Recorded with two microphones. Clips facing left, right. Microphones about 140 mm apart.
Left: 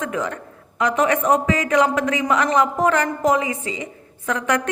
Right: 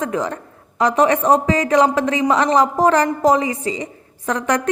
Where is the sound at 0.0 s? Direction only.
35° right (ahead or behind).